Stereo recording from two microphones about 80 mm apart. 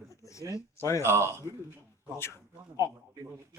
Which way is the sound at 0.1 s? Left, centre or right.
Left.